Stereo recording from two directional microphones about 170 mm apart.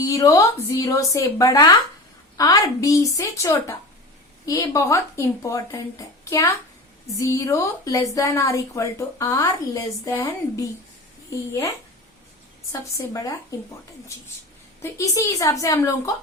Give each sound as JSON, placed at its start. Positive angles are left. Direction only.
{"t": 0.0, "sound": "a woman's voice", "side_deg": 20}
{"t": 7.2, "sound": "a woman's voice", "side_deg": 20}
{"t": 13.0, "sound": "a woman's voice", "side_deg": 20}
{"t": 14.8, "sound": "a woman's voice", "side_deg": 15}